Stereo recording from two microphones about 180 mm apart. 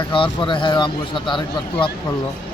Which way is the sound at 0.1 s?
25° left (ahead or behind).